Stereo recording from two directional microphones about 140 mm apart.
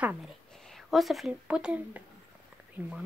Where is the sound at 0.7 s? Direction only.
Centre (ahead or behind).